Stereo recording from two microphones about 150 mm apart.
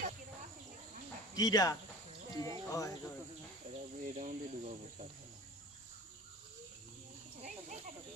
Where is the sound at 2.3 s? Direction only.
25° left (ahead or behind).